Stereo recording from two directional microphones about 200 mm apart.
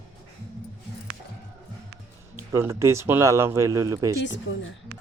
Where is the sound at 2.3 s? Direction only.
15° right (ahead or behind).